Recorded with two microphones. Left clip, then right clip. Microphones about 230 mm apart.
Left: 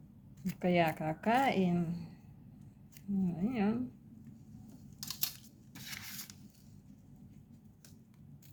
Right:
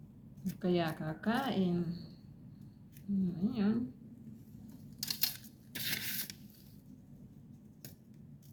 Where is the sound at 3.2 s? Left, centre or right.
Left.